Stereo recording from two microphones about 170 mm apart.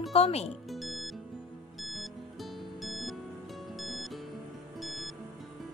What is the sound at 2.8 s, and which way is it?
Music, centre (ahead or behind).